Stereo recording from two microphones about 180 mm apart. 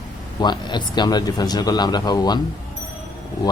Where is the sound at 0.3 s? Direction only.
25° left (ahead or behind).